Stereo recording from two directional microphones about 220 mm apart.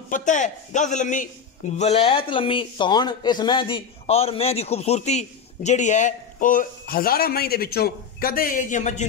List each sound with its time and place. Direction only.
0.1 s a man's voice: 35° left (ahead or behind)